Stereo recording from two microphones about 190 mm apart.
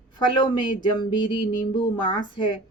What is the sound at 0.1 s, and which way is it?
Speech, 25° left (ahead or behind).